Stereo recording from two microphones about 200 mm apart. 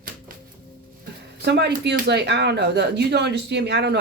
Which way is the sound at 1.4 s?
55° right (ahead or behind).